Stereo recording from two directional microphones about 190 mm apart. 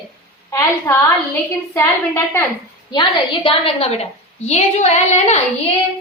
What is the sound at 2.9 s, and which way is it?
A woman's voice, 25° left (ahead or behind).